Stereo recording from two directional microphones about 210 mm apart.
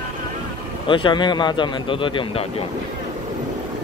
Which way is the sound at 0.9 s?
25° left (ahead or behind).